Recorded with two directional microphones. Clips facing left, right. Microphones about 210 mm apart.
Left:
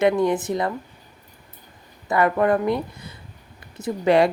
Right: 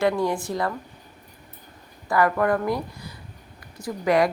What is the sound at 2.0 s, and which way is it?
Speech, 20° left (ahead or behind).